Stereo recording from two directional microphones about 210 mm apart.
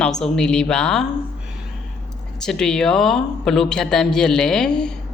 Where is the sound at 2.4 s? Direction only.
5° left (ahead or behind).